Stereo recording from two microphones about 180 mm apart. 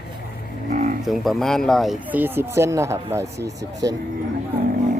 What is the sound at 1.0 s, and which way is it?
Speech, centre (ahead or behind).